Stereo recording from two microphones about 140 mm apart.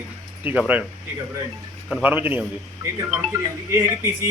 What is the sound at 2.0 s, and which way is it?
A man's voice, 15° right (ahead or behind).